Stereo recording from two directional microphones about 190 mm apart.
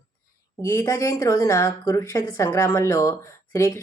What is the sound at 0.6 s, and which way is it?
A woman's voice, 15° left (ahead or behind).